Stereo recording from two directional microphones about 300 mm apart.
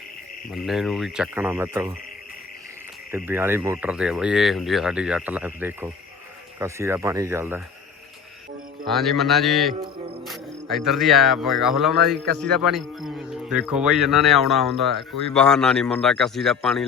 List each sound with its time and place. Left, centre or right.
0.5 s speech: centre
3.1 s speech: centre
8.9 s speech: centre
12.0 s a man's voice: right
12.4 s speech: centre